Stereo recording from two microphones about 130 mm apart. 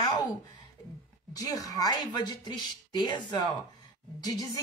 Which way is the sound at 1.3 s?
25° left (ahead or behind).